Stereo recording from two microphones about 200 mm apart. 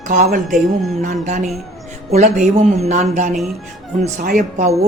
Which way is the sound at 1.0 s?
40° right (ahead or behind).